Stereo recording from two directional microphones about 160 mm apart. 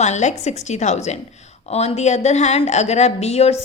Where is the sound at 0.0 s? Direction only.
45° left (ahead or behind).